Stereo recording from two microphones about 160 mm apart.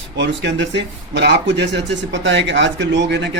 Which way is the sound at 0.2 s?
90° right.